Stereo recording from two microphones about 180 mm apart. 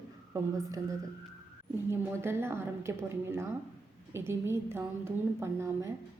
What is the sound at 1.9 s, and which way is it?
A woman's voice, 15° right (ahead or behind).